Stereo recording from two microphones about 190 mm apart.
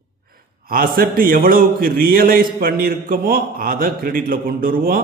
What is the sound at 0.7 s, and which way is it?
Speech, 50° right (ahead or behind).